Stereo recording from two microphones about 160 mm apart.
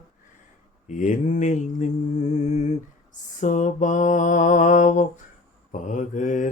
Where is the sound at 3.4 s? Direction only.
50° left (ahead or behind).